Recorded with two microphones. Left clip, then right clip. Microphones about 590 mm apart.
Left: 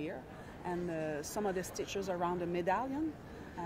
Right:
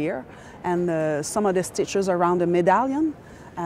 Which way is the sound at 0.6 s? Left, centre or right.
Right.